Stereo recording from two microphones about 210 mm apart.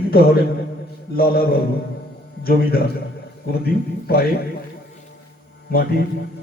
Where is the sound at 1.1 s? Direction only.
45° left (ahead or behind).